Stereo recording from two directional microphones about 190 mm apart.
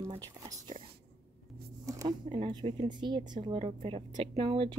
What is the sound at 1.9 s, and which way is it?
A woman's voice, 20° right (ahead or behind).